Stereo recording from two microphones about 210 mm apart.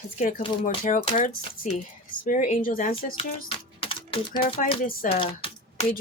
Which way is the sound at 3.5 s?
25° left (ahead or behind).